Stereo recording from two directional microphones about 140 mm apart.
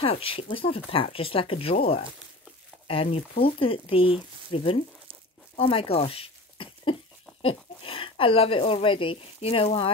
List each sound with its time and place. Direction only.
0.0 s speech: 40° left (ahead or behind)
2.9 s speech: 40° left (ahead or behind)